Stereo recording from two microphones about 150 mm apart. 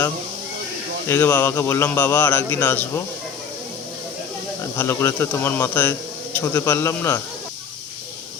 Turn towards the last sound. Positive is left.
turn(degrees=15)  # may be behind; listen again after turning